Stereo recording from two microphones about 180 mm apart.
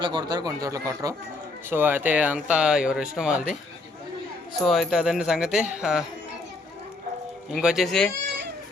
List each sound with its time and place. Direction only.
0.0 s speech: 25° right (ahead or behind); by 3.6 s 5° right (ahead or behind)
4.6 s speech: centre (ahead or behind)
7.5 s speech: centre (ahead or behind)